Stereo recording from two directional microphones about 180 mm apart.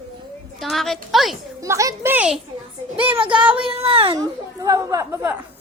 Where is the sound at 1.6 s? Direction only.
15° right (ahead or behind).